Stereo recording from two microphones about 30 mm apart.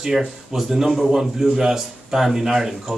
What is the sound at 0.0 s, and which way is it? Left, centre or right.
A man's voice, centre.